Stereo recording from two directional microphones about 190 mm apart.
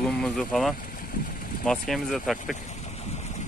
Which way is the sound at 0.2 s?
Centre (ahead or behind).